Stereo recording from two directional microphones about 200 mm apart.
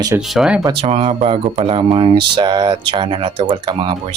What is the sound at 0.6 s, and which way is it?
Speech, 25° right (ahead or behind).